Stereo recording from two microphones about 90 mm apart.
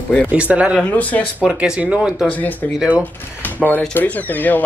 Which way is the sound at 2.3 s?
20° left (ahead or behind).